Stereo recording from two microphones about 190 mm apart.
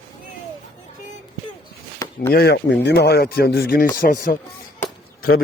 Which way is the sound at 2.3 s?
60° left (ahead or behind).